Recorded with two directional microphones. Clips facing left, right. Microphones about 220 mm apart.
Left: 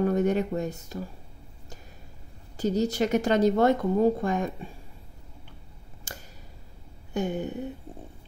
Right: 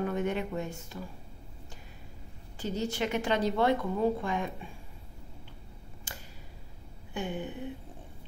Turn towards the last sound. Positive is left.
turn(degrees=40)  # may be behind; listen again after turning